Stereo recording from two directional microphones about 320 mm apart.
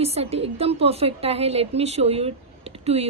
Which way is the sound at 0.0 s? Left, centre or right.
Centre.